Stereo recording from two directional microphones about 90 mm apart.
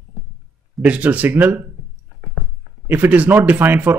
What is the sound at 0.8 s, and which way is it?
Speech, 15° right (ahead or behind).